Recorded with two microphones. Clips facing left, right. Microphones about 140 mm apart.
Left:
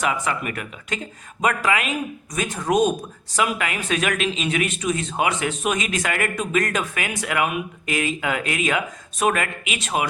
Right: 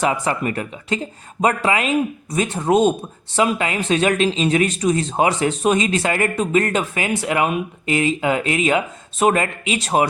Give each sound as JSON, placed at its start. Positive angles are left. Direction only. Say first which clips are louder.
{"t": 0.0, "sound": "speech", "louder": "right 4 dB", "side_deg": -30}